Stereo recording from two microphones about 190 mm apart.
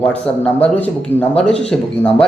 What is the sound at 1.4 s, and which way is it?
Speech, 5° left (ahead or behind).